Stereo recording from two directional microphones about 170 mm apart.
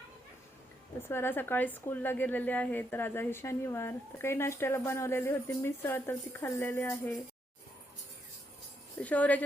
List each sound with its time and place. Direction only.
1.0 s a woman's voice: 15° left (ahead or behind)
9.0 s a woman's voice: 10° left (ahead or behind)